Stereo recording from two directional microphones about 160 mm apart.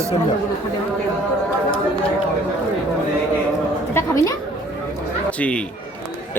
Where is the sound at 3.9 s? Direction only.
20° left (ahead or behind).